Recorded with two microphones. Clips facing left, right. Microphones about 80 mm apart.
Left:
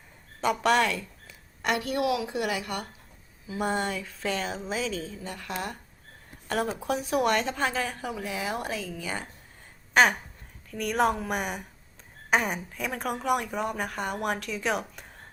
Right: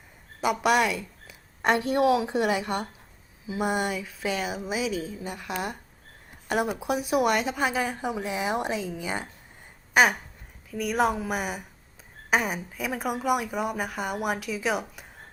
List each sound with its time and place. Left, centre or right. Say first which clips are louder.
0.4 s speech: right 1 dB; centre
1.6 s a woman's voice: right 5 dB; right
3.4 s speech: right 2 dB; centre
9.9 s a sound: even; centre
10.7 s speech: right 1 dB; centre